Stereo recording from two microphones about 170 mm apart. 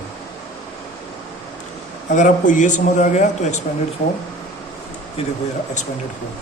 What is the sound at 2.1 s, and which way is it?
Speech, 50° left (ahead or behind).